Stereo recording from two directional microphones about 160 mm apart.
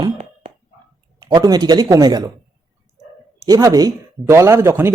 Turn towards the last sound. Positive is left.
turn(degrees=-15)  # may be behind; listen again after turning